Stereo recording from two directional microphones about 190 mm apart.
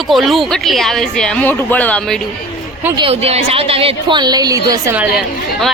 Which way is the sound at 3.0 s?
30° right (ahead or behind).